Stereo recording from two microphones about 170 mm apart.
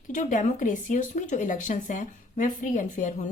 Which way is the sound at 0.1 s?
50° left (ahead or behind).